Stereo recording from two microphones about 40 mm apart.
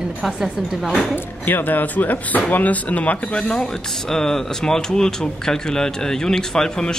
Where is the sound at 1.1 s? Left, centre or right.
Left.